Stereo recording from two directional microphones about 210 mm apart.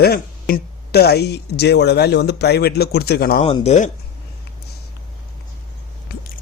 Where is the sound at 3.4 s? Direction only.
30° left (ahead or behind).